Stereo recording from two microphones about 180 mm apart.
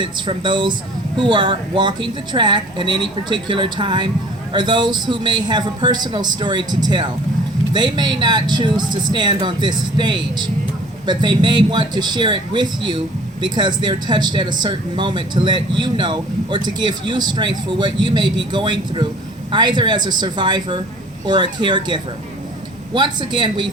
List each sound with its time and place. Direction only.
0.0 s speech: 25° right (ahead or behind)